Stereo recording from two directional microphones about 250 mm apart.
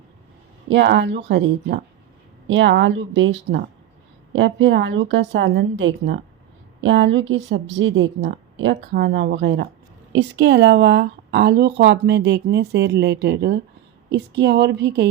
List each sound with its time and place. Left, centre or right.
0.7 s a woman's voice: right